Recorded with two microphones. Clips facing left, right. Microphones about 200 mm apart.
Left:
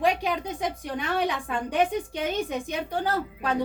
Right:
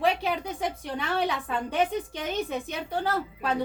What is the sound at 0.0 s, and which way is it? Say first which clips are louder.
A woman's voice: left 1 dB; 15° left (ahead or behind).